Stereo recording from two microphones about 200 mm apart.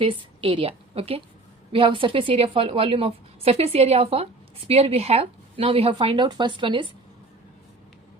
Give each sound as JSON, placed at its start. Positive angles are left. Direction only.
{"t": 0.0, "sound": "a woman's voice", "side_deg": -25}